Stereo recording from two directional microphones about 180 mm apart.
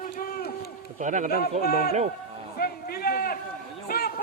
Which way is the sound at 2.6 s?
60° left (ahead or behind).